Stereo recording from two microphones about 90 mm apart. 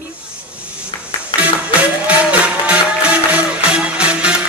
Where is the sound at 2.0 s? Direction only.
15° right (ahead or behind).